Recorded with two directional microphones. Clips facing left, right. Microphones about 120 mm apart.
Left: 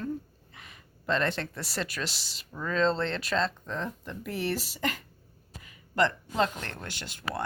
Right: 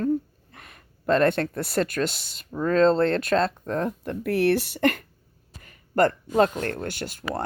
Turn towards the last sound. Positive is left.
turn(degrees=-45)  # may be behind; listen again after turning